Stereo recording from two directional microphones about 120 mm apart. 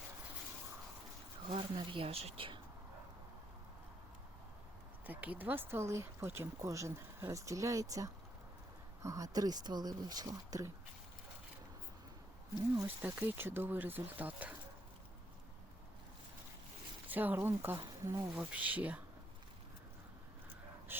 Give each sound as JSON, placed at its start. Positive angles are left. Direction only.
{"t": 1.5, "sound": "speech", "side_deg": -45}
{"t": 5.0, "sound": "speech", "side_deg": -15}
{"t": 13.0, "sound": "speech", "side_deg": -15}
{"t": 17.1, "sound": "speech", "side_deg": -15}
{"t": 18.3, "sound": "speech", "side_deg": -10}
{"t": 20.9, "sound": "a sound", "side_deg": -20}